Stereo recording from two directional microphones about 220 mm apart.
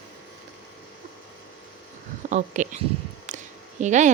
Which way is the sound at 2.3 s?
35° right (ahead or behind).